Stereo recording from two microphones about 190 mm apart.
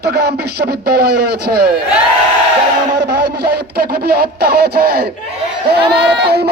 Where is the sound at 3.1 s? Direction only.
55° right (ahead or behind).